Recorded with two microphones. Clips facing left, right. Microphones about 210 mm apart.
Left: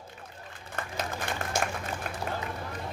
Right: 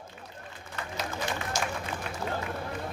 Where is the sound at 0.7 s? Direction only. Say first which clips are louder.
Left 1 dB; 50° left (ahead or behind).